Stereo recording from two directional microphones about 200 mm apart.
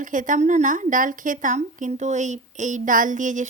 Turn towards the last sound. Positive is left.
turn(degrees=-40)  # may be behind; listen again after turning